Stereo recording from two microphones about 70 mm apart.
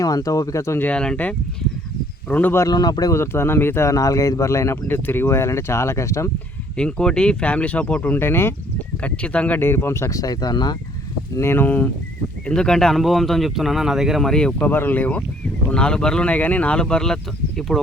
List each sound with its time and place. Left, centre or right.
0.0 s speech: left
0.9 s speech: centre
2.6 s speech: left
3.1 s speech: left
3.8 s speech: left
4.9 s speech: left
6.7 s speech: centre; by 8.5 s left
9.0 s speech: centre
9.6 s speech: left
11.3 s speech: left
12.5 s speech: centre
14.3 s speech: centre
14.7 s speech: left
15.7 s speech: centre